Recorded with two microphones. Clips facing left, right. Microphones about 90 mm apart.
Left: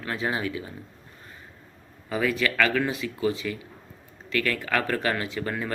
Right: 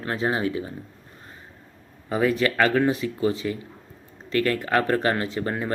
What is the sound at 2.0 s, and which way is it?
Speech, 35° right (ahead or behind).